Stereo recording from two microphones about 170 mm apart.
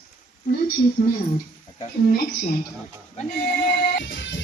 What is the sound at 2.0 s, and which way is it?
Speech, 65° left (ahead or behind).